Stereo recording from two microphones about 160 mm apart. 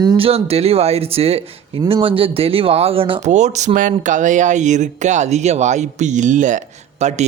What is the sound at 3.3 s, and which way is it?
A man's voice, 45° right (ahead or behind).